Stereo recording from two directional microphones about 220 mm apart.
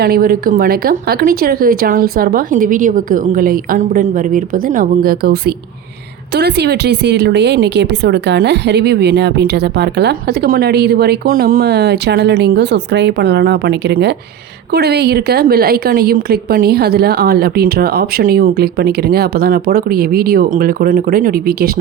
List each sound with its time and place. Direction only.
0.0 s a woman's voice: 40° right (ahead or behind)